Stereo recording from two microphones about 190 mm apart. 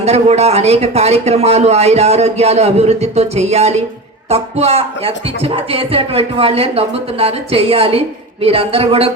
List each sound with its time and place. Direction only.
0.0 s speech: 35° right (ahead or behind)